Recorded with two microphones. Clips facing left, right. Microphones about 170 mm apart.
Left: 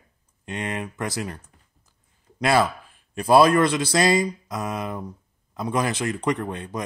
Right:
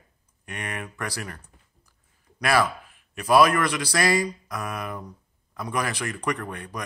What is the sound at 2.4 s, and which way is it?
A man's voice, 25° left (ahead or behind).